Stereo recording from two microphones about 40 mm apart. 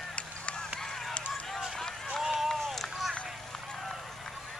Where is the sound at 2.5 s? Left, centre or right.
Centre.